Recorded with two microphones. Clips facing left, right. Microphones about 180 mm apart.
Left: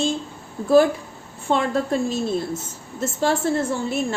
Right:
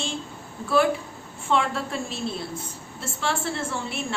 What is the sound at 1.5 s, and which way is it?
A woman's voice, 40° left (ahead or behind).